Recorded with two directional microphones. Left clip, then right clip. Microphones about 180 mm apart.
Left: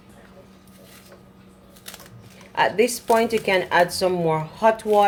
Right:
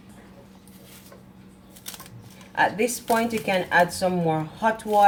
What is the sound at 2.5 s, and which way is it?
Speech, 45° left (ahead or behind).